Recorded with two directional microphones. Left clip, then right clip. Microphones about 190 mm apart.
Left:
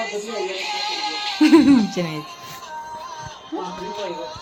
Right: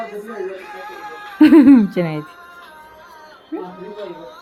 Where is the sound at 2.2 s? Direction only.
5° right (ahead or behind).